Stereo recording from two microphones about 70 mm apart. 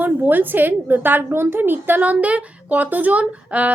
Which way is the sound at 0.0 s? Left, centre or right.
Right.